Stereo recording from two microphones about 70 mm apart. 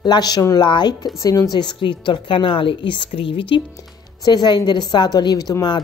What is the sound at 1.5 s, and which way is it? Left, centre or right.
Speech, left.